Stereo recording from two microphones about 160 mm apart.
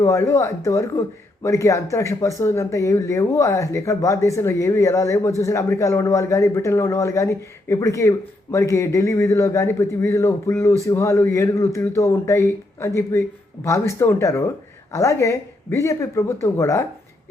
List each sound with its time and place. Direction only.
0.0 s a man's voice: 20° left (ahead or behind)